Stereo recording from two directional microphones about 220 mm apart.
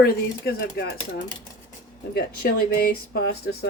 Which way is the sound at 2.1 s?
45° left (ahead or behind).